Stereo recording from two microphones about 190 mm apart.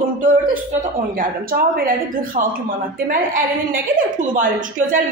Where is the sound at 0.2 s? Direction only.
45° right (ahead or behind).